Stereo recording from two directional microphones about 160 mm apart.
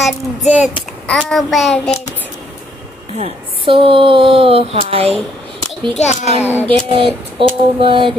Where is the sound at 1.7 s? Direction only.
40° left (ahead or behind).